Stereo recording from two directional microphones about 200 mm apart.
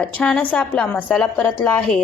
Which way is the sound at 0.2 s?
5° left (ahead or behind).